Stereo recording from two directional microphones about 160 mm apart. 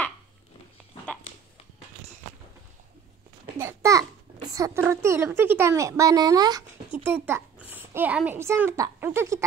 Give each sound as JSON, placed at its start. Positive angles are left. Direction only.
{"t": 3.5, "sound": "babbling", "side_deg": -20}
{"t": 4.6, "sound": "speech", "side_deg": -15}
{"t": 7.2, "sound": "a child's voice", "side_deg": -10}